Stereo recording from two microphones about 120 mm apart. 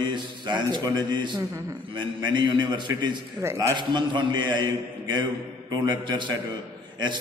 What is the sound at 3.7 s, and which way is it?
A man's voice, 40° right (ahead or behind).